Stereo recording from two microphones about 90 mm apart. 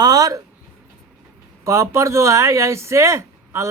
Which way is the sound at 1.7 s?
35° right (ahead or behind).